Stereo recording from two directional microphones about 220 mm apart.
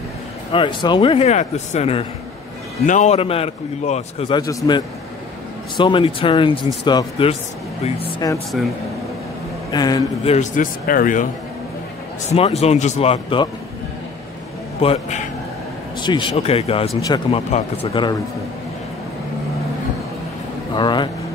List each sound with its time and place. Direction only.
0.5 s a man's voice: 20° left (ahead or behind)
8.5 s speech: centre (ahead or behind)
9.7 s a man's voice: 20° left (ahead or behind)
10.3 s speech: 35° left (ahead or behind)
12.3 s a man's voice: 30° left (ahead or behind)
14.8 s a man's voice: 30° left (ahead or behind)
20.7 s a man's voice: 20° left (ahead or behind)